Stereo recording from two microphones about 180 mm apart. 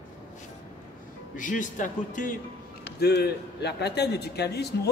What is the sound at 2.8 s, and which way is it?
A man's voice, 65° left (ahead or behind).